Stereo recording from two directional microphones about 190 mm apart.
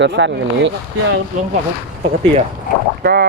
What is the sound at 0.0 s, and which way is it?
Speech, 70° right (ahead or behind).